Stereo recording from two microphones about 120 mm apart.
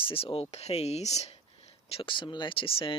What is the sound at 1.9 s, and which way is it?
Speech, 50° left (ahead or behind).